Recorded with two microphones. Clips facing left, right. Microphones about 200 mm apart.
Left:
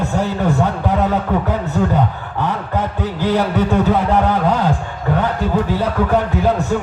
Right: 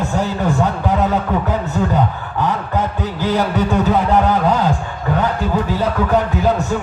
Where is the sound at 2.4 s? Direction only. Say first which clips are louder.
Right 1 dB; 60° left (ahead or behind).